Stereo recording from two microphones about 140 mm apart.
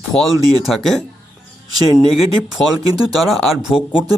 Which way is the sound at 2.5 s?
Centre (ahead or behind).